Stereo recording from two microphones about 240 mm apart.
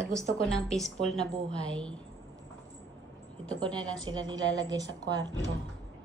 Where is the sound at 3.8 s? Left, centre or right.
Centre.